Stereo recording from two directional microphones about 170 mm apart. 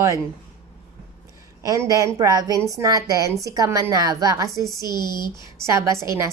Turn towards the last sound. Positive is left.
turn(degrees=-15)  # may be behind; listen again after turning